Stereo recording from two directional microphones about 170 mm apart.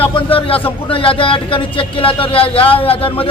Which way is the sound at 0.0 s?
30° left (ahead or behind).